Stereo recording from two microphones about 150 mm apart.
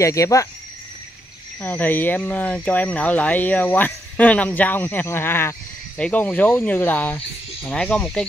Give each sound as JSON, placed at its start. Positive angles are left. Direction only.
{"t": 0.0, "sound": "speech", "side_deg": 20}
{"t": 1.6, "sound": "speech", "side_deg": 10}